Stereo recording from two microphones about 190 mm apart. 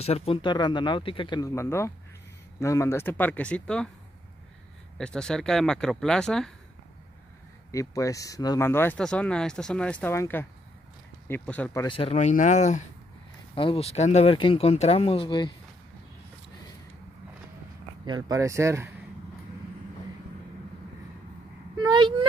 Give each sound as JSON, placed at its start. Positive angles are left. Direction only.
{"t": 0.0, "sound": "speech", "side_deg": 30}
{"t": 4.9, "sound": "speech", "side_deg": 5}
{"t": 7.7, "sound": "speech", "side_deg": 15}
{"t": 11.8, "sound": "speech", "side_deg": 25}
{"t": 18.0, "sound": "speech", "side_deg": -20}
{"t": 21.7, "sound": "a sound", "side_deg": -25}